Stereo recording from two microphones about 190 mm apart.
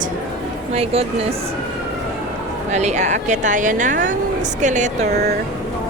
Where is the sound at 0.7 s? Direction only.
30° right (ahead or behind).